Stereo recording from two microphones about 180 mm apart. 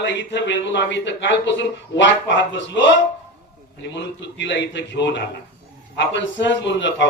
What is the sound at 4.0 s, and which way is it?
A man's voice, 75° left (ahead or behind).